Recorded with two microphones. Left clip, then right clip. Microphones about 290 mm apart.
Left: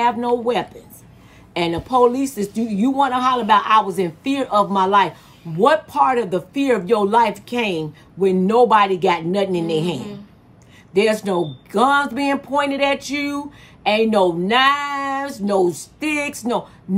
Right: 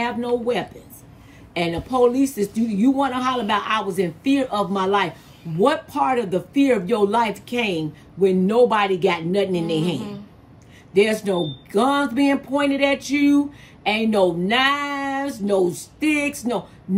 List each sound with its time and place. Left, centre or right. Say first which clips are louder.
0.0 s speech: left 5 dB; centre
9.9 s a woman's voice: even; centre
10.9 s a woman's voice: left 1 dB; centre